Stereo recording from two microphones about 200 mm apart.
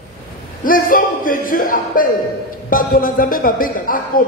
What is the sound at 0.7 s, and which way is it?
A man's voice, 45° left (ahead or behind).